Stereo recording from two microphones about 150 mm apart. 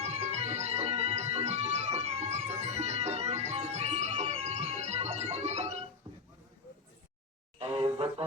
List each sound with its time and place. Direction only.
0.0 s music: 45° right (ahead or behind)
7.6 s music: 40° right (ahead or behind)